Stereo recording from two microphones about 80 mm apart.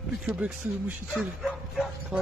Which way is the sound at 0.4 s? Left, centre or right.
Centre.